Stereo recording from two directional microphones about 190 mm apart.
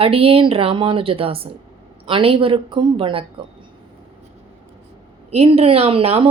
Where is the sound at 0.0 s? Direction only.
30° right (ahead or behind).